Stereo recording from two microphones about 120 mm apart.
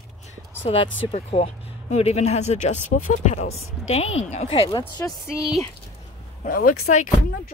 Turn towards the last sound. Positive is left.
turn(degrees=90)